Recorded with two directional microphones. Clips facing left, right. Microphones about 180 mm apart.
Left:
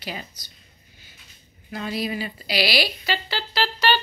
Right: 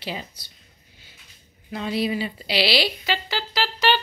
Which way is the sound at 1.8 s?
25° right (ahead or behind).